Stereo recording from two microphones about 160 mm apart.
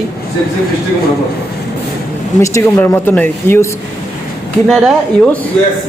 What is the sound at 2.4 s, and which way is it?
Speech, 20° left (ahead or behind).